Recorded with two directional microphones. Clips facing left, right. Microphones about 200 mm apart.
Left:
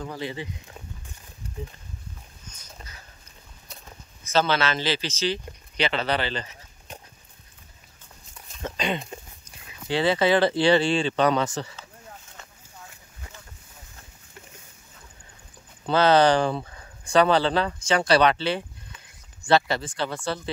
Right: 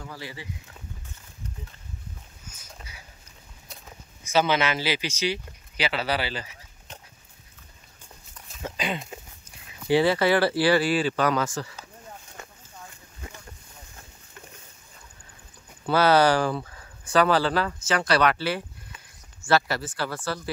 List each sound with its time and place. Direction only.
0.2 s speech: 20° left (ahead or behind)
2.4 s boat: 5° right (ahead or behind)
4.2 s speech: 15° right (ahead or behind)
6.9 s dog: 10° left (ahead or behind)
8.5 s speech: 5° right (ahead or behind)
10.0 s speech: 20° left (ahead or behind)
15.9 s speech: 10° right (ahead or behind)
16.3 s speech: 20° left (ahead or behind)